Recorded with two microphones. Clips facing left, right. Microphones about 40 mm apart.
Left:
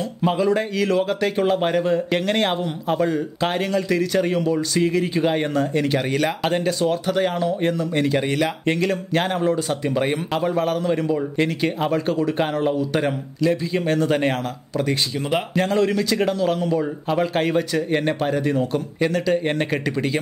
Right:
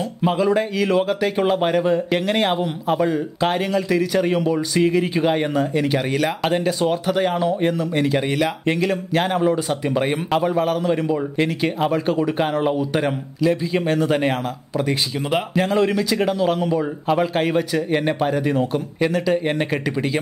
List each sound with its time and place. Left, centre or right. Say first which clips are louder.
0.2 s speech: right 1 dB; centre
13.0 s speech: right 1 dB; centre